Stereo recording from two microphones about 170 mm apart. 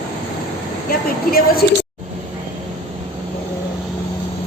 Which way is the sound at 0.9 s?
60° left (ahead or behind).